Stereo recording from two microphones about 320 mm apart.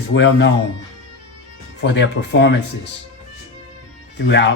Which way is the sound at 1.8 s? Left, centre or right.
Left.